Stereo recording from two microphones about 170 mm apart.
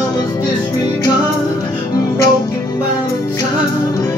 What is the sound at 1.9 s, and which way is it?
Music, 20° left (ahead or behind).